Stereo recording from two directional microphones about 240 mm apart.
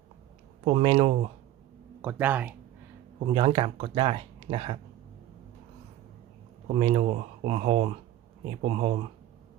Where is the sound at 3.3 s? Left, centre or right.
Right.